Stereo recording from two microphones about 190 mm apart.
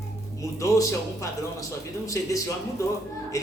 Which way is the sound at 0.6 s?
15° left (ahead or behind).